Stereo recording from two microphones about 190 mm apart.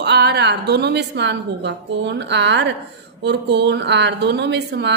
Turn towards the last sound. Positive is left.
turn(degrees=-65)  # may be behind; listen again after turning